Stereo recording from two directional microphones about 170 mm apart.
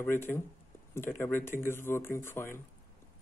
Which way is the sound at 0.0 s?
15° left (ahead or behind).